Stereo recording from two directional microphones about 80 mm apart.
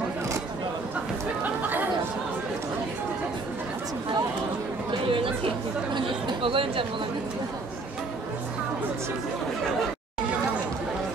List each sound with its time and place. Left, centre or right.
5.9 s chatter: right